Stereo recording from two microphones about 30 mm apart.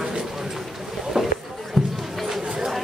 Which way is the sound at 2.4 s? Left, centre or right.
Centre.